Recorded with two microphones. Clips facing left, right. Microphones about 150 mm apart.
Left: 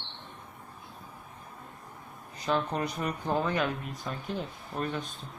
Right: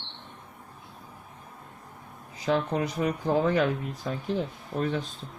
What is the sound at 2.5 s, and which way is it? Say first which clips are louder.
Speech: right 3 dB; 70° right (ahead or behind).